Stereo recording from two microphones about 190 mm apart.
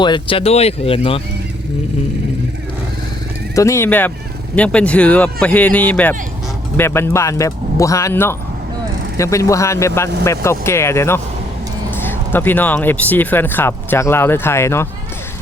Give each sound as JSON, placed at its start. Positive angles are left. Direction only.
{"t": 0.0, "sound": "speech", "side_deg": 25}
{"t": 3.5, "sound": "speech", "side_deg": 15}